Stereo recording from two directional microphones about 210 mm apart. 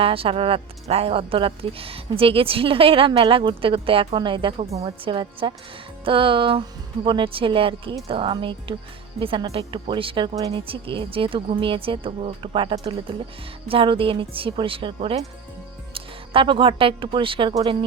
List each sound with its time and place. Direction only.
0.0 s a woman's voice: 25° right (ahead or behind)